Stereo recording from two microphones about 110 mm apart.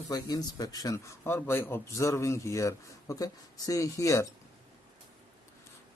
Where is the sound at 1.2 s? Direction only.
20° left (ahead or behind).